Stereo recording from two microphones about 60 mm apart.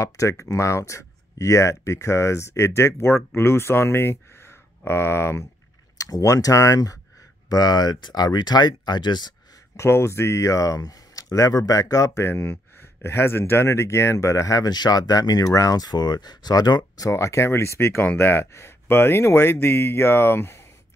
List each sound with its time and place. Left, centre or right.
0.0 s speech: left
5.9 s speech: left
7.4 s speech: left
9.8 s speech: left
12.3 s speech: left
17.1 s speech: left